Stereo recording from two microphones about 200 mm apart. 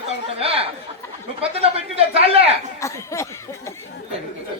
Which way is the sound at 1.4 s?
30° right (ahead or behind).